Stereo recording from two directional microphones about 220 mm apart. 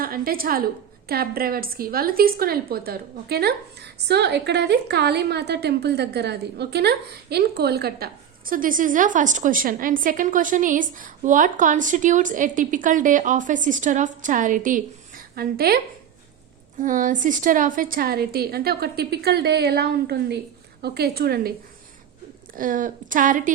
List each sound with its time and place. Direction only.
0.0 s a woman's voice: 40° right (ahead or behind)
16.8 s a woman's voice: 35° right (ahead or behind)
22.5 s a woman's voice: 40° right (ahead or behind)